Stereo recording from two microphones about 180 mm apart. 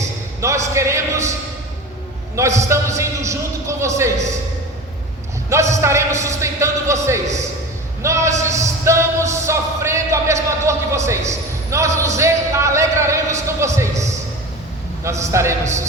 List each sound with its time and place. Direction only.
0.4 s a man's voice: 15° right (ahead or behind)
2.3 s a man's voice: 15° right (ahead or behind)
5.7 s a man's voice: 15° right (ahead or behind)
8.0 s music: 15° right (ahead or behind)
15.2 s a man's voice: 15° right (ahead or behind)